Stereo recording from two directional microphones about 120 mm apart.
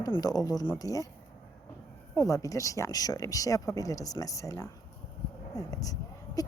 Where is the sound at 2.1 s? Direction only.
25° left (ahead or behind).